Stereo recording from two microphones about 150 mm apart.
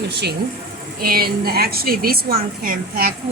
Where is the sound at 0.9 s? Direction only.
90° right.